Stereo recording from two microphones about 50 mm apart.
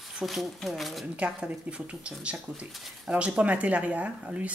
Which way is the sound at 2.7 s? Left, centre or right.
Centre.